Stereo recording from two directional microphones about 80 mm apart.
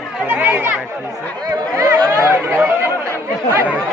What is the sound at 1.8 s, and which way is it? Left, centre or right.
Chatter, right.